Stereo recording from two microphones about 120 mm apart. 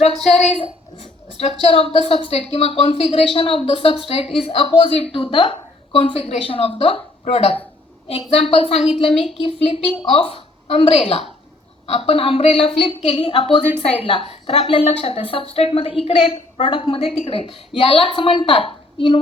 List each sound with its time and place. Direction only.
0.2 s a woman's voice: centre (ahead or behind)
1.6 s a woman's voice: 55° left (ahead or behind)